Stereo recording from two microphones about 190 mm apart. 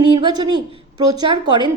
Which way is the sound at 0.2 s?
25° right (ahead or behind).